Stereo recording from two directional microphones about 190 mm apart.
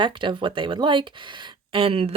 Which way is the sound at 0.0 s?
25° right (ahead or behind).